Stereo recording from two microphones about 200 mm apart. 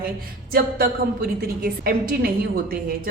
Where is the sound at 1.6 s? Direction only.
45° right (ahead or behind).